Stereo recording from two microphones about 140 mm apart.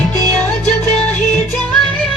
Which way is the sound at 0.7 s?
5° left (ahead or behind).